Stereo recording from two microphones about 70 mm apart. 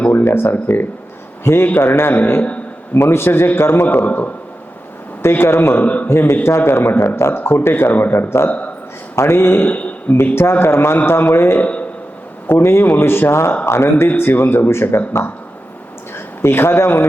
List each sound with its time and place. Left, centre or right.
0.1 s speech: left
5.8 s a man's voice: left
6.1 s speech: left
8.4 s speech: left
9.1 s speech: left
9.6 s speech: left
10.3 s speech: left
11.6 s a sound: left
12.5 s speech: left